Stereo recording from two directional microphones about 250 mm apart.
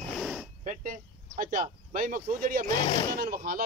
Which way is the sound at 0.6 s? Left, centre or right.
Right.